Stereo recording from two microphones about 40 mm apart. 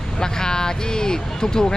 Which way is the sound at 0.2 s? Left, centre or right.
Centre.